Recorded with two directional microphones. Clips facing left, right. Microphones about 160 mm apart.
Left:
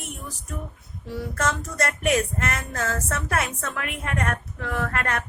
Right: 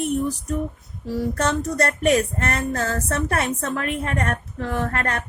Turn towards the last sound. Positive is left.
turn(degrees=-35)  # may be behind; listen again after turning